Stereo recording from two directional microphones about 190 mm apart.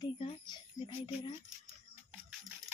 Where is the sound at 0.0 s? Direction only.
25° left (ahead or behind).